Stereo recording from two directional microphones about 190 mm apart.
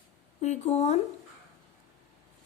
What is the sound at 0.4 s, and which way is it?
Speech, 35° left (ahead or behind).